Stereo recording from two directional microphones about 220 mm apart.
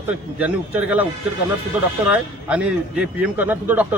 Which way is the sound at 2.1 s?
5° right (ahead or behind).